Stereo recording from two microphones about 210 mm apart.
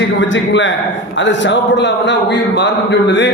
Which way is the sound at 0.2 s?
60° left (ahead or behind).